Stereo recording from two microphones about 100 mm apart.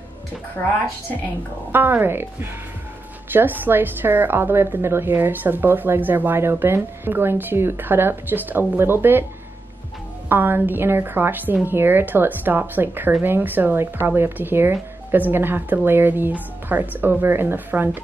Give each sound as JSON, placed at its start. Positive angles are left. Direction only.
{"t": 0.6, "sound": "speech", "side_deg": 20}
{"t": 1.7, "sound": "a woman's voice", "side_deg": -20}
{"t": 10.2, "sound": "a woman's voice", "side_deg": -20}